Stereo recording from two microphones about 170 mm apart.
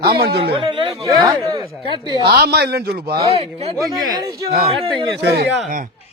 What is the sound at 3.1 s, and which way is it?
Speech, 35° right (ahead or behind).